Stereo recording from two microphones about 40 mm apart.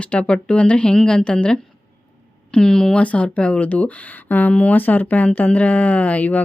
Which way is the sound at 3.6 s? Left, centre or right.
Left.